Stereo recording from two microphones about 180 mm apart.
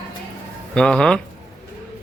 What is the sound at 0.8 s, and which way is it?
Speech, 5° left (ahead or behind).